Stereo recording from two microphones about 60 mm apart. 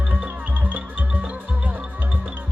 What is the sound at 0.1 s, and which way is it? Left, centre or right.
Music, right.